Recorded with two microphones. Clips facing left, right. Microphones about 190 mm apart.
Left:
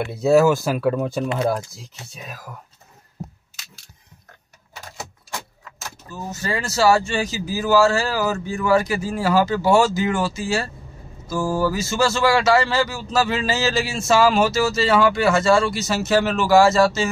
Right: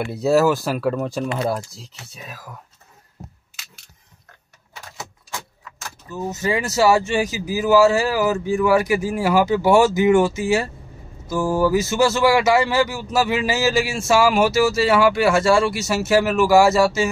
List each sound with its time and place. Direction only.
0.0 s speech: centre (ahead or behind)
6.0 s speech: 20° right (ahead or behind)